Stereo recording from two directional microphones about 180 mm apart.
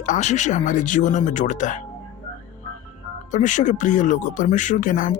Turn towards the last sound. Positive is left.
turn(degrees=45)  # may be behind; listen again after turning